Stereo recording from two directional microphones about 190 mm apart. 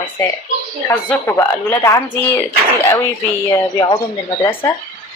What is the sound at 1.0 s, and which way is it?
Speech, 10° left (ahead or behind).